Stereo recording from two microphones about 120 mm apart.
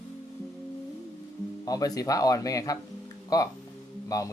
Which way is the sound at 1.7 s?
30° left (ahead or behind).